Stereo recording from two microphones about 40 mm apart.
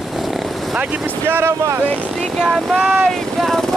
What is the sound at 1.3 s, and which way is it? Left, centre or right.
Vehicle, right.